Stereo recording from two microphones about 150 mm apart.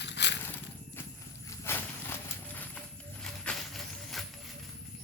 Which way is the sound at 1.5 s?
15° left (ahead or behind).